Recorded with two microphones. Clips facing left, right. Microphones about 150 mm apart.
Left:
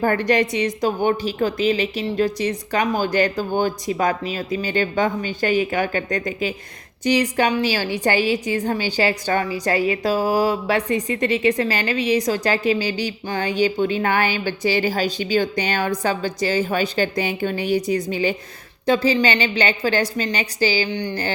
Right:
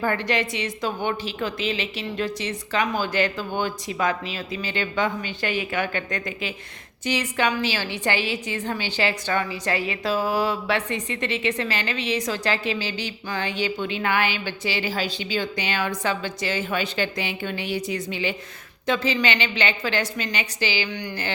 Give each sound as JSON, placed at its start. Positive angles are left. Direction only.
{"t": 0.0, "sound": "a woman's voice", "side_deg": 40}